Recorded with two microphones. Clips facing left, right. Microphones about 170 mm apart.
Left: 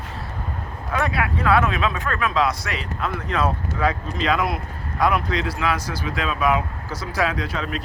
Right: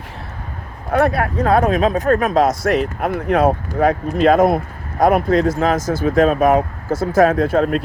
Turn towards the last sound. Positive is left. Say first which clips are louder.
# right 11 dB
turn(degrees=-50)  # may be behind; listen again after turning